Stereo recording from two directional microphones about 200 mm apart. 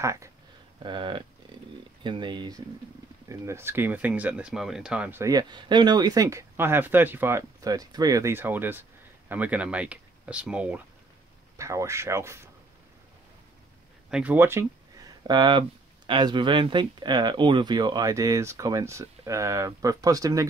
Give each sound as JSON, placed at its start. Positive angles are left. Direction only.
{"t": 0.0, "sound": "speech", "side_deg": -15}
{"t": 14.1, "sound": "speech", "side_deg": -10}